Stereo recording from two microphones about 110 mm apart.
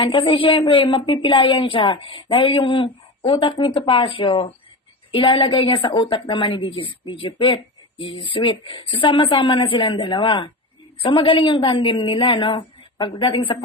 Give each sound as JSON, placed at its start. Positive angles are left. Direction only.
{"t": 0.0, "sound": "a woman's voice", "side_deg": 50}